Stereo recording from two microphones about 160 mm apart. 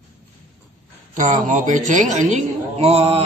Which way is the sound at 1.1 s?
50° right (ahead or behind).